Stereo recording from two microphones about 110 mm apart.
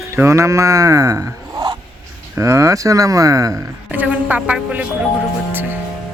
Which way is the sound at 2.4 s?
25° right (ahead or behind).